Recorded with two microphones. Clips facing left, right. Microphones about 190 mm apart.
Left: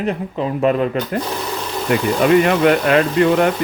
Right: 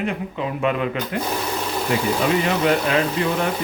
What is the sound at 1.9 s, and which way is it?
Speech, 60° left (ahead or behind).